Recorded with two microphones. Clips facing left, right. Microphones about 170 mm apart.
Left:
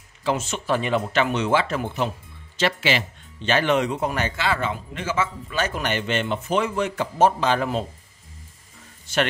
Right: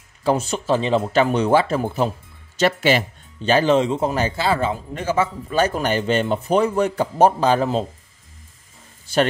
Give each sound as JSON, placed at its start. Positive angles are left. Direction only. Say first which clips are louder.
{"t": 0.2, "sound": "speech", "louder": "right 5 dB", "side_deg": -40}